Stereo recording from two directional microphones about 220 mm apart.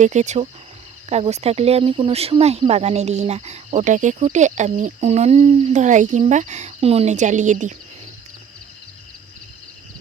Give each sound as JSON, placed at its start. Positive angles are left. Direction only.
{"t": 0.0, "sound": "speech", "side_deg": -30}